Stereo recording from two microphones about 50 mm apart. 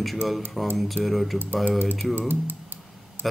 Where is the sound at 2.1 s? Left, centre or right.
Right.